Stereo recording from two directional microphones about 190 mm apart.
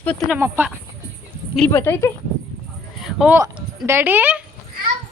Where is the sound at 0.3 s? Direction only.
10° right (ahead or behind).